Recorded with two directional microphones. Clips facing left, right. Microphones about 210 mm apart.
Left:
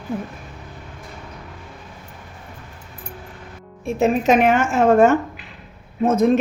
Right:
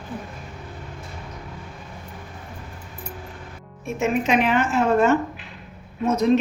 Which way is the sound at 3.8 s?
40° left (ahead or behind).